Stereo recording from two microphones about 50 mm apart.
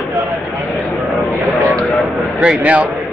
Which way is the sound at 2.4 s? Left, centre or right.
Right.